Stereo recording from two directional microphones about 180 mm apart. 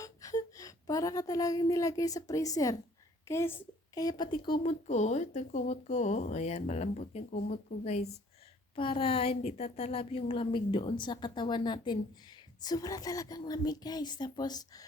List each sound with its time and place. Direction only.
0.0 s a woman's voice: 20° left (ahead or behind)
4.6 s a woman's voice: 40° left (ahead or behind)
8.7 s a woman's voice: 30° left (ahead or behind)